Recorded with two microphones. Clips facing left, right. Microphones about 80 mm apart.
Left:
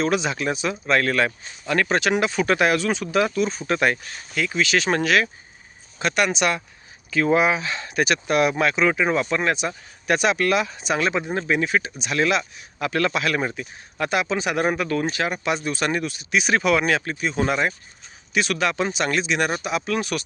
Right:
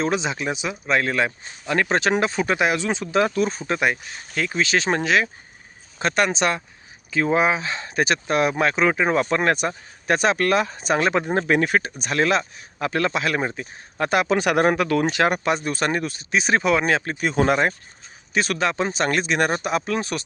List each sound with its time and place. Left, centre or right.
0.0 s speech: right
3.7 s speech: centre
4.4 s speech: right
6.0 s speech: right
15.4 s speech: right
17.2 s speech: right